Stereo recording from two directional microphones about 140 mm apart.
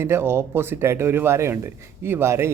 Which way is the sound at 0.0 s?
15° right (ahead or behind).